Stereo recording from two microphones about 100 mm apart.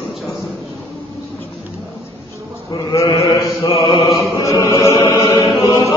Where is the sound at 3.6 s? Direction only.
70° left (ahead or behind).